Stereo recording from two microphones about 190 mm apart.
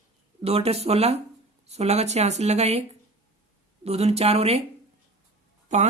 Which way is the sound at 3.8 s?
35° right (ahead or behind).